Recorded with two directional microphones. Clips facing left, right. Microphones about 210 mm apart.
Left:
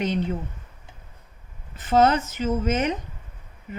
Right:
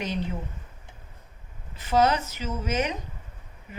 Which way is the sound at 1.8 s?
50° left (ahead or behind).